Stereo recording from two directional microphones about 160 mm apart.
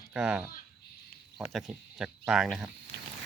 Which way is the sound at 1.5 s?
Centre (ahead or behind).